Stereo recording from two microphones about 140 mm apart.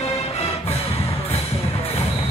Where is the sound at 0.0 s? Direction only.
45° left (ahead or behind).